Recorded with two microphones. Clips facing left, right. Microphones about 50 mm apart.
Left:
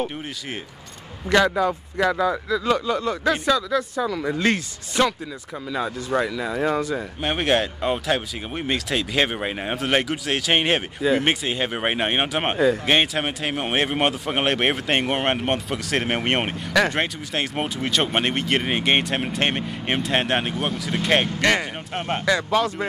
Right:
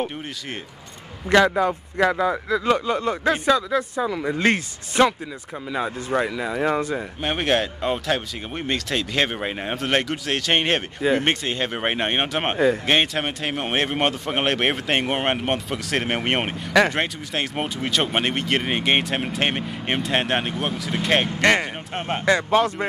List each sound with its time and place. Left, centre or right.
1.3 s speech: centre
1.6 s speech: right
7.2 s speech: centre
21.3 s speech: right
21.9 s speech: centre
22.2 s speech: right